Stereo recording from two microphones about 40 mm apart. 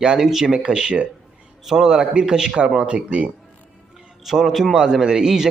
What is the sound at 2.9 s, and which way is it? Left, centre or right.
Speech, right.